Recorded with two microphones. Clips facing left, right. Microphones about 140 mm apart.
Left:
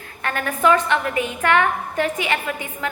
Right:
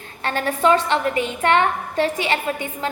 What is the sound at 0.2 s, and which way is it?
A woman's voice, 30° right (ahead or behind).